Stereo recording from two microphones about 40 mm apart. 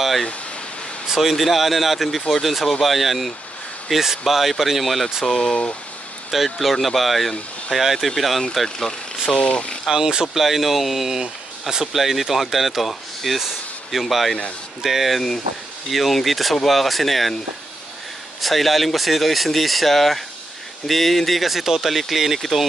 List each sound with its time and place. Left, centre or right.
1.0 s speech: centre
5.2 s speech: centre
6.3 s speech: centre
8.6 s speech: centre
9.4 s speech: left
9.8 s speech: centre
10.3 s speech: centre
18.4 s speech: centre